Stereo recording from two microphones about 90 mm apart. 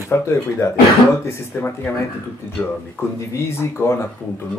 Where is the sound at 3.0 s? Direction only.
25° left (ahead or behind).